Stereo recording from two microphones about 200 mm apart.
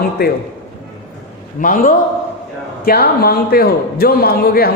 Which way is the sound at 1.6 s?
45° left (ahead or behind).